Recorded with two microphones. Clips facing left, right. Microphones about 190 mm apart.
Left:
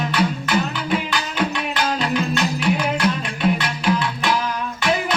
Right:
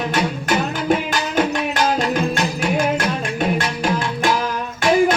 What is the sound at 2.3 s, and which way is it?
Music, 45° right (ahead or behind).